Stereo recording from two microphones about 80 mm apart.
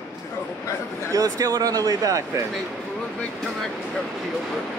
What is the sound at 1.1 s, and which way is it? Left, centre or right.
Speech, right.